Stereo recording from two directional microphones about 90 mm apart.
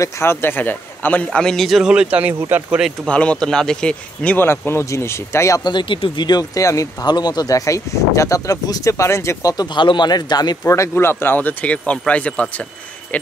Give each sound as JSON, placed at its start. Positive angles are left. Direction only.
{"t": 0.0, "sound": "a man's voice", "side_deg": 30}
{"t": 3.1, "sound": "a man's voice", "side_deg": 15}
{"t": 4.4, "sound": "speech", "side_deg": 25}
{"t": 5.6, "sound": "speech", "side_deg": 55}
{"t": 6.6, "sound": "speech", "side_deg": 40}
{"t": 9.8, "sound": "a man's voice", "side_deg": 60}
{"t": 10.6, "sound": "a man's voice", "side_deg": 30}